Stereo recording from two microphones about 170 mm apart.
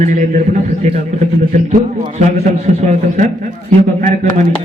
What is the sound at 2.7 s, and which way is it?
Speech, 45° right (ahead or behind).